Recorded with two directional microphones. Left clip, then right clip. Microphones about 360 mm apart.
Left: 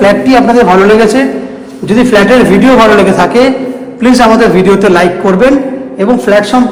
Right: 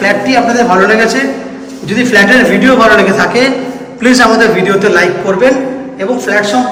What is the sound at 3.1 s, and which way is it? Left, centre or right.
A man's voice, centre.